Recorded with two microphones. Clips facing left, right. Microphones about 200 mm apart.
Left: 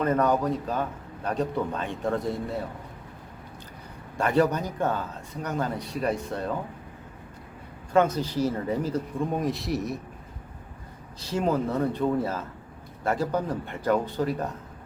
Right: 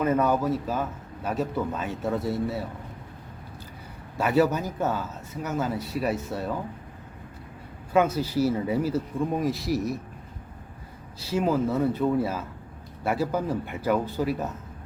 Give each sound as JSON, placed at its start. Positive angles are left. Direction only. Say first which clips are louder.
{"t": 0.0, "sound": "a man's voice", "louder": "even", "side_deg": -5}
{"t": 4.2, "sound": "a man's voice", "louder": "right 1 dB", "side_deg": -5}
{"t": 7.9, "sound": "speech", "louder": "even", "side_deg": -5}
{"t": 11.2, "sound": "a man's voice", "louder": "right 1 dB", "side_deg": -5}